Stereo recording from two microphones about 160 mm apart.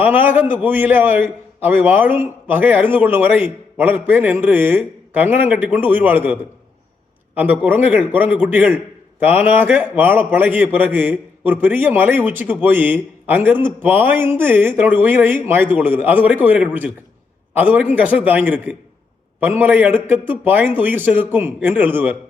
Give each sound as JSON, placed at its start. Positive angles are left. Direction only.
{"t": 0.0, "sound": "a man's voice", "side_deg": -10}